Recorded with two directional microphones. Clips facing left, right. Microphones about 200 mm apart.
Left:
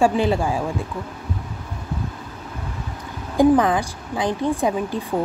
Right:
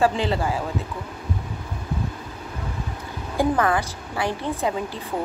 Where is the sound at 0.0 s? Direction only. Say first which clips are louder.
Left 3 dB; 15° left (ahead or behind).